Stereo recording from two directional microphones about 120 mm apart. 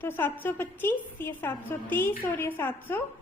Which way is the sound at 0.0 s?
15° left (ahead or behind).